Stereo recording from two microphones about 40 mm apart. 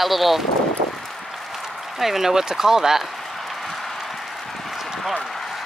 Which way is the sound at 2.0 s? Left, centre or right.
Centre.